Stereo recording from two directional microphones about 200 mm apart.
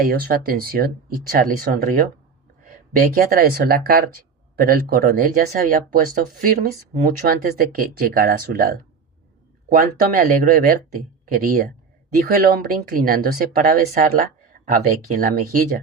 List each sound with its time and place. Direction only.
0.0 s speech: 45° right (ahead or behind)